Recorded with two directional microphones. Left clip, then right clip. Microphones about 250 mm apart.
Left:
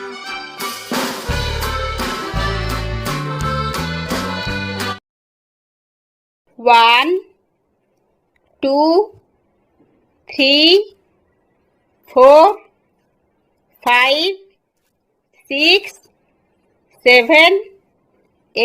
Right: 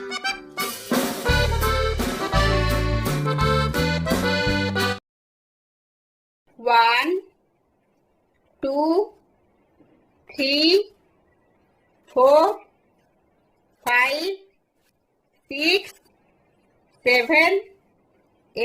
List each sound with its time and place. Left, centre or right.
0.0 s music: centre
6.6 s speech: left
10.2 s a woman's voice: left
12.1 s a woman's voice: left
13.8 s a woman's voice: left
15.4 s a woman's voice: left
16.9 s a woman's voice: left